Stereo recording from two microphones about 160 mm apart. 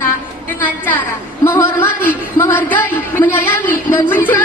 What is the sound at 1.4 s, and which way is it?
Speech, 15° left (ahead or behind).